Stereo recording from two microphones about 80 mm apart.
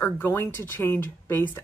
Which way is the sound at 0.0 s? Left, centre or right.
Left.